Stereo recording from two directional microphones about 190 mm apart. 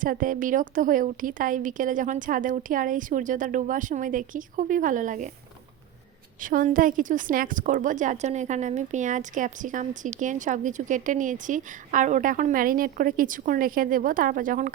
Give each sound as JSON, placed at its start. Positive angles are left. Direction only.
{"t": 0.0, "sound": "a woman's voice", "side_deg": -45}
{"t": 6.4, "sound": "a woman's voice", "side_deg": -45}